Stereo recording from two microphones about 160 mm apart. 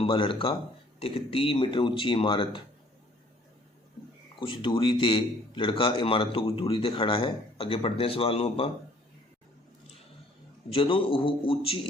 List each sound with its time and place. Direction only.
0.0 s a man's voice: 30° left (ahead or behind)
4.4 s a man's voice: 30° left (ahead or behind)
10.7 s a man's voice: 35° left (ahead or behind)